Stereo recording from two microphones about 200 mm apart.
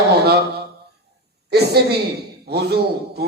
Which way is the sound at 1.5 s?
55° right (ahead or behind).